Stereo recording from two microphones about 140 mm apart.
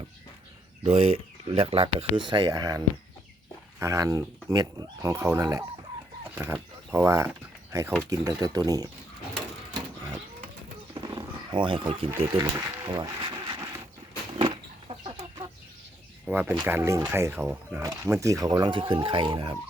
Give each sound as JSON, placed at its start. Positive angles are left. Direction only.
{"t": 0.9, "sound": "speech", "side_deg": -50}
{"t": 10.9, "sound": "wild animals", "side_deg": -30}
{"t": 12.4, "sound": "speech", "side_deg": -25}
{"t": 12.8, "sound": "a sound", "side_deg": -35}
{"t": 14.3, "sound": "chicken", "side_deg": -40}
{"t": 16.2, "sound": "speech", "side_deg": -10}